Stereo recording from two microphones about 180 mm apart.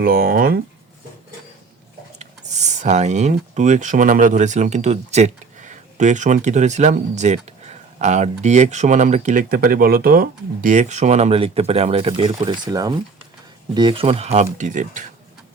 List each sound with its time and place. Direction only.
0.0 s speech: 55° right (ahead or behind)
2.1 s speech: 40° right (ahead or behind)